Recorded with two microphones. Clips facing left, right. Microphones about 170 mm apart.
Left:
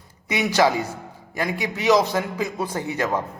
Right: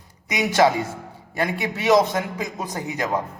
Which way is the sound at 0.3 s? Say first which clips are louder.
Right 1 dB; 25° right (ahead or behind).